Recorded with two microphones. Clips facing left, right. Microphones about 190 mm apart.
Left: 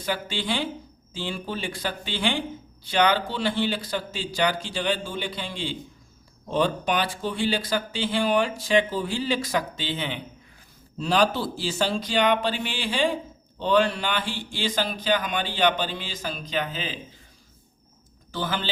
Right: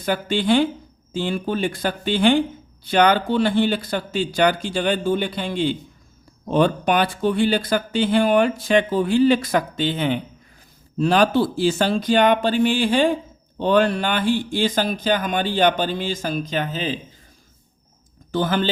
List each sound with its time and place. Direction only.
0.0 s speech: 55° right (ahead or behind)
18.3 s speech: 50° right (ahead or behind)